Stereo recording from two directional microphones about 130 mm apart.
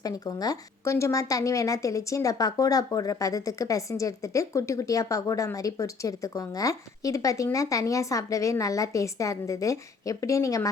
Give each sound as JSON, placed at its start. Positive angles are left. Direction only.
{"t": 0.0, "sound": "a woman's voice", "side_deg": 30}